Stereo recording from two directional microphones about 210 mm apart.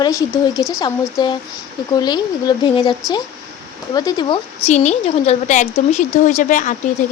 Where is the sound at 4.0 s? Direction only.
20° left (ahead or behind).